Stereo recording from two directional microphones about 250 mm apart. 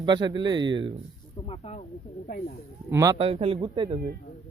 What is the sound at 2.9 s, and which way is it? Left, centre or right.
A man's voice, centre.